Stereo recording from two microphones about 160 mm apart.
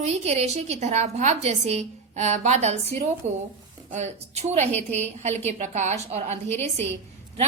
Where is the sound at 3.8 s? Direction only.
45° right (ahead or behind).